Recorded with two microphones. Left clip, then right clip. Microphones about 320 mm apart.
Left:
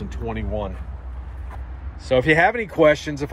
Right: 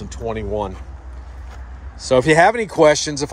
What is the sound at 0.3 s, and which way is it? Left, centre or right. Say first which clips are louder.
Speech: right 5 dB; right.